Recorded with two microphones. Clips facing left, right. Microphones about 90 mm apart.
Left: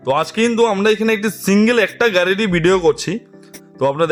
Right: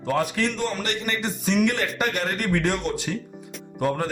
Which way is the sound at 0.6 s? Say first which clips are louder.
Left 14 dB; 90° left.